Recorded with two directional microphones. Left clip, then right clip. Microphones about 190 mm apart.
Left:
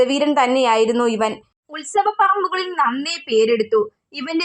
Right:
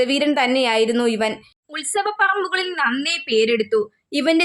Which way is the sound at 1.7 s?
20° right (ahead or behind).